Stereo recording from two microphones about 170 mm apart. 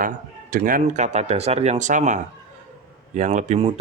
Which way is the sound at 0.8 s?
45° right (ahead or behind).